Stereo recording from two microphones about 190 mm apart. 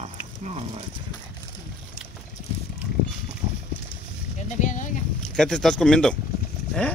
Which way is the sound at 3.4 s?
25° right (ahead or behind).